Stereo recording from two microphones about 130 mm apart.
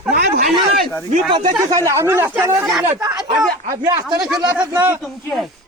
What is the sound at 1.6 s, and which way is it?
Speech, 25° right (ahead or behind).